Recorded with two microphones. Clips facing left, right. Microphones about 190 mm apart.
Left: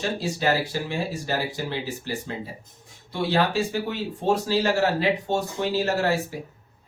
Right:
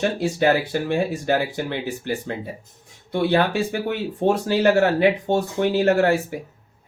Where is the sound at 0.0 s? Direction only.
55° right (ahead or behind).